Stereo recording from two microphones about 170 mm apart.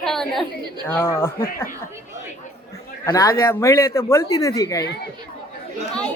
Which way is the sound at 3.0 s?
20° left (ahead or behind).